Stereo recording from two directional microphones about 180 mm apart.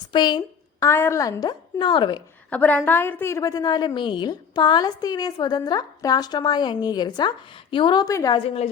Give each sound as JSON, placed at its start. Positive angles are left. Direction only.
{"t": 0.1, "sound": "a woman's voice", "side_deg": 25}
{"t": 2.5, "sound": "a woman's voice", "side_deg": 10}
{"t": 8.4, "sound": "a woman's voice", "side_deg": 35}